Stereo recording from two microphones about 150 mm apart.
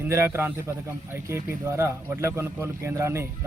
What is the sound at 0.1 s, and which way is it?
A man's voice, 15° right (ahead or behind).